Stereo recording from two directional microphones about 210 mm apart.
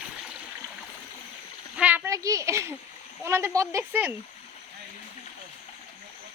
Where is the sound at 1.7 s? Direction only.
5° right (ahead or behind).